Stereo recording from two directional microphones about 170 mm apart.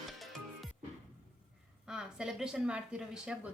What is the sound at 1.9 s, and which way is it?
A woman's voice, 5° right (ahead or behind).